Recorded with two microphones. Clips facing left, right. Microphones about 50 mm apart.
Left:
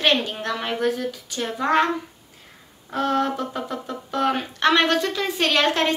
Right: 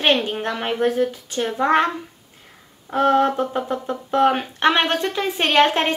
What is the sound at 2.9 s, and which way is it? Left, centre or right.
Speech, right.